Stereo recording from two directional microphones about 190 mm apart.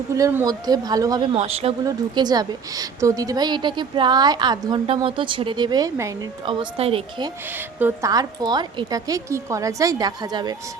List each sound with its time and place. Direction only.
0.2 s a woman's voice: 15° right (ahead or behind); by 7.3 s 30° right (ahead or behind)
7.8 s a woman's voice: 15° right (ahead or behind)